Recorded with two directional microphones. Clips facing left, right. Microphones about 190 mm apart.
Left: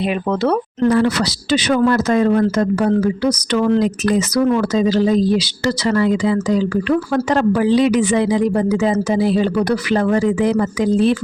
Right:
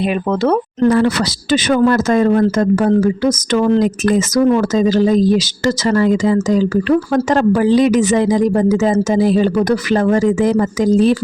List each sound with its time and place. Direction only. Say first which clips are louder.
0.4 s speech: right 3 dB; 45° right (ahead or behind)